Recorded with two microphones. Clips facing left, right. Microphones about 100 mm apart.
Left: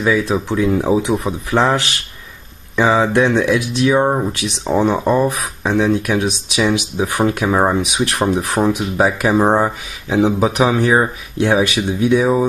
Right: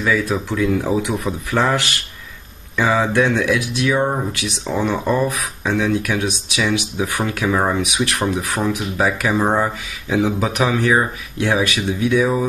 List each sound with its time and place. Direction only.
0.3 s speech: 30° left (ahead or behind)
4.9 s speech: 15° left (ahead or behind)